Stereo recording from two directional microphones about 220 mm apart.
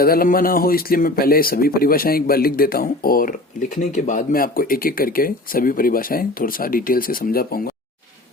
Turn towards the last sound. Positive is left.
turn(degrees=45)  # may be behind; listen again after turning